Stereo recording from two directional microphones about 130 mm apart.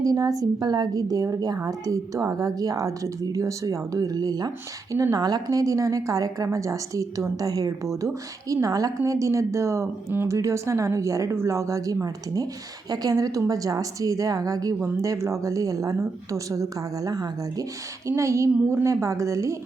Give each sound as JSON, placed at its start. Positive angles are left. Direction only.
{"t": 0.0, "sound": "a woman's voice", "side_deg": -30}